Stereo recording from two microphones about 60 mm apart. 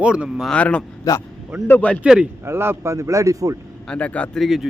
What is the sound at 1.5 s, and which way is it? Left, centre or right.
Speech, right.